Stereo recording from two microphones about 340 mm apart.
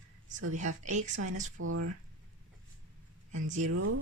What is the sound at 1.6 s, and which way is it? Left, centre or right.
Speech, right.